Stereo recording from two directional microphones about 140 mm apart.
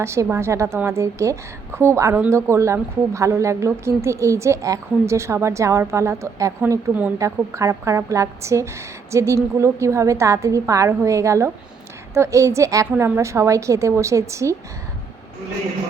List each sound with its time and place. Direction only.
0.0 s a woman's voice: 20° right (ahead or behind)